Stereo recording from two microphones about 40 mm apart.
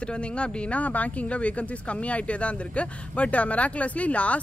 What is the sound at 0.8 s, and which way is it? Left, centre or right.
Speech, left.